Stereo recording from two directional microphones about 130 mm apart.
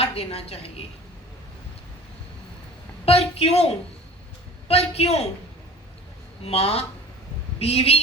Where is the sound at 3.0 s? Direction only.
50° left (ahead or behind).